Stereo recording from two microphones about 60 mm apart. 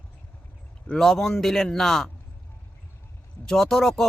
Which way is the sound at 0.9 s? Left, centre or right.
Centre.